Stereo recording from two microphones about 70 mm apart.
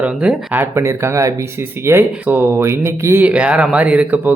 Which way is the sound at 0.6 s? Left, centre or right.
Right.